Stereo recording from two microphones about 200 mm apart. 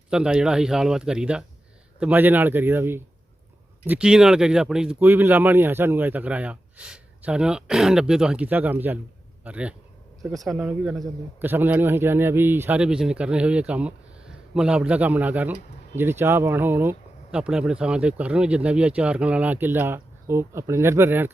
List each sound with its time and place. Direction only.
0.1 s a man's voice: 5° right (ahead or behind)